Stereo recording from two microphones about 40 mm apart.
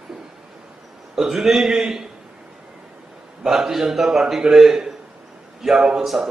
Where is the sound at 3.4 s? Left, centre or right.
Centre.